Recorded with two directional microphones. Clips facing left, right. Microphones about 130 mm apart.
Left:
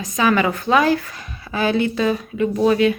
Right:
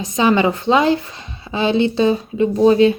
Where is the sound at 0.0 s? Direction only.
25° right (ahead or behind).